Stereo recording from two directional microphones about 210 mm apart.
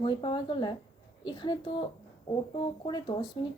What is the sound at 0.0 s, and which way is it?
Speech, 25° left (ahead or behind).